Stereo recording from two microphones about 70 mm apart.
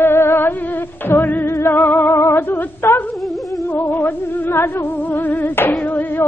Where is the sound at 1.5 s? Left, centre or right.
Left.